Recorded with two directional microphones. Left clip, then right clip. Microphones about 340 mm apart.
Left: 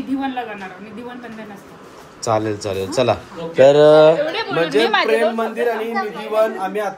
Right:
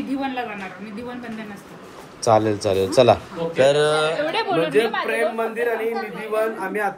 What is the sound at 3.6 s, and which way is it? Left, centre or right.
Speech, centre.